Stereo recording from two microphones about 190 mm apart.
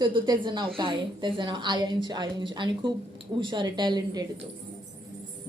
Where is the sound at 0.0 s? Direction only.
25° right (ahead or behind).